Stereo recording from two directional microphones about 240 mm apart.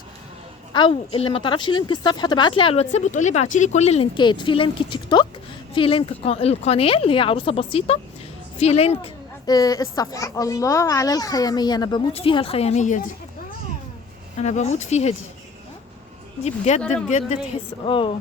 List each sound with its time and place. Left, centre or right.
0.7 s a child's voice: left
14.3 s speech: left
16.4 s speech: left